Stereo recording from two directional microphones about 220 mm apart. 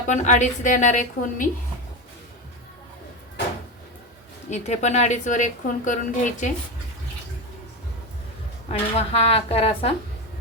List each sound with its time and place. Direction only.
0.1 s a woman's voice: 35° left (ahead or behind)
4.4 s a woman's voice: 30° left (ahead or behind)
9.0 s speech: 30° left (ahead or behind)